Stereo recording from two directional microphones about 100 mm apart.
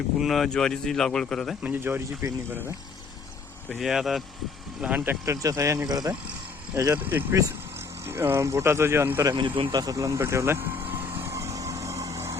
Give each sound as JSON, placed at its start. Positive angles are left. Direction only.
{"t": 0.2, "sound": "speech", "side_deg": 0}
{"t": 1.6, "sound": "speech", "side_deg": -20}
{"t": 3.8, "sound": "speech", "side_deg": -5}
{"t": 4.8, "sound": "speech", "side_deg": -15}
{"t": 5.2, "sound": "speech", "side_deg": -35}
{"t": 7.0, "sound": "speech", "side_deg": -20}
{"t": 9.7, "sound": "vehicle", "side_deg": -40}